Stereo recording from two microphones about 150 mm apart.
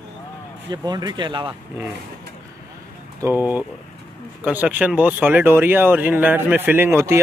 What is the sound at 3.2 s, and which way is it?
Speech, 15° right (ahead or behind).